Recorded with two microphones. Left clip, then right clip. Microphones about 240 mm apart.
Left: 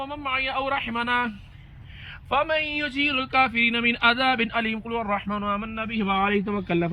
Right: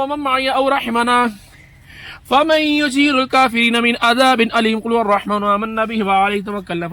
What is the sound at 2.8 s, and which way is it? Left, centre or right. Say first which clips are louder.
A man's voice: right 9 dB; centre.